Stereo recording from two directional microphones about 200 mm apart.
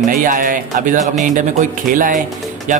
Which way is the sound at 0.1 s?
40° right (ahead or behind).